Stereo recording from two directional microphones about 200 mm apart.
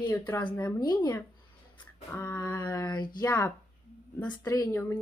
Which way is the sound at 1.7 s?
10° left (ahead or behind).